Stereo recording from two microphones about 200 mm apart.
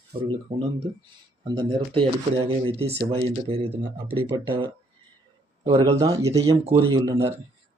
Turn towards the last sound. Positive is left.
turn(degrees=-20)  # may be behind; listen again after turning